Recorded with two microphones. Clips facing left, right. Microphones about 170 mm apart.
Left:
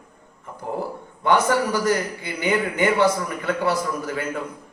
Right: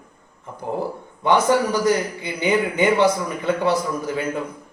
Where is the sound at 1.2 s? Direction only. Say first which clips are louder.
Right 2 dB; 15° right (ahead or behind).